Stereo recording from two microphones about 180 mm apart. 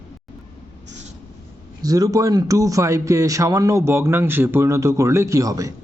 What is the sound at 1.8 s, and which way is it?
A man's voice, 20° right (ahead or behind).